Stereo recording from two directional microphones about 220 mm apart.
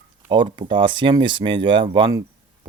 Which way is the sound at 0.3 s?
20° right (ahead or behind).